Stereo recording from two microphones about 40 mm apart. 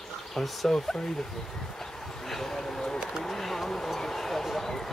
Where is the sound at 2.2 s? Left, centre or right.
Centre.